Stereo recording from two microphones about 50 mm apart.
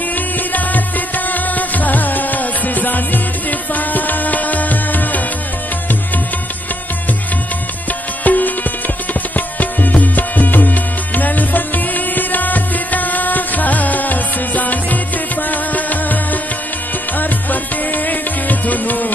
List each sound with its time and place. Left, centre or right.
0.5 s music: left
8.2 s music: left
9.6 s music: left
17.2 s music: left